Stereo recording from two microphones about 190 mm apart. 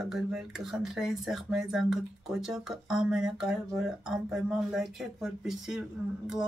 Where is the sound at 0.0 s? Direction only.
5° right (ahead or behind).